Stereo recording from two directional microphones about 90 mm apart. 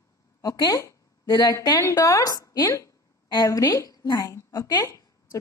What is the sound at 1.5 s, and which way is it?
A woman's voice, 40° left (ahead or behind).